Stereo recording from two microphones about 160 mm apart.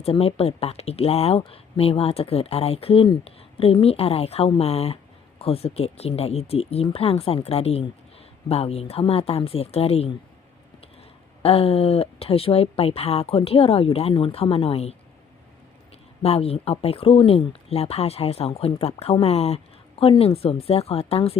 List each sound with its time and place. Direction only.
0.0 s speech: 35° left (ahead or behind)
11.4 s speech: 40° left (ahead or behind)
16.2 s speech: 40° left (ahead or behind)